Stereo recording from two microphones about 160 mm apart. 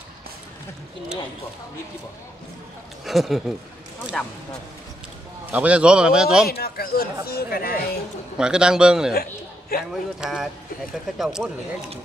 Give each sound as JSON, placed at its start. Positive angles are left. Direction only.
{"t": 3.1, "sound": "a man's voice", "side_deg": 0}
{"t": 5.5, "sound": "a man's voice", "side_deg": -10}
{"t": 6.4, "sound": "speech", "side_deg": 75}
{"t": 8.4, "sound": "a man's voice", "side_deg": -5}
{"t": 9.1, "sound": "a man's voice", "side_deg": 70}
{"t": 9.8, "sound": "a man's voice", "side_deg": -5}